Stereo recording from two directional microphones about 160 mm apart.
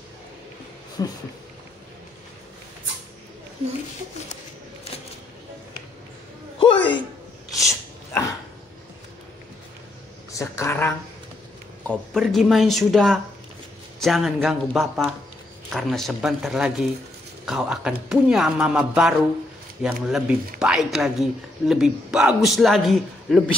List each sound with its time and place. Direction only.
1.0 s speech: 25° left (ahead or behind)
6.6 s music: 30° left (ahead or behind)
10.3 s a sound: 20° left (ahead or behind)
11.9 s speech: centre (ahead or behind)